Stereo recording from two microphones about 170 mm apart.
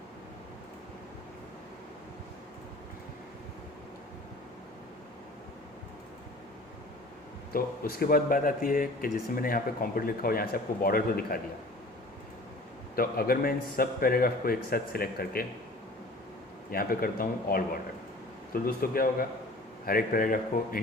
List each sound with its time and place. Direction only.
7.5 s speech: 60° left (ahead or behind)
13.0 s speech: 60° left (ahead or behind)
16.7 s speech: 60° left (ahead or behind)